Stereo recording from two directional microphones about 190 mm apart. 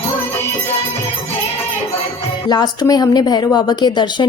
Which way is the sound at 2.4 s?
20° left (ahead or behind).